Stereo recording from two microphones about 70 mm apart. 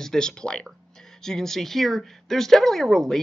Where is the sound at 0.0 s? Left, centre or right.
Centre.